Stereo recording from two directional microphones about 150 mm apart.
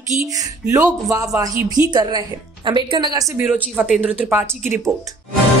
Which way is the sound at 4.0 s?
10° right (ahead or behind).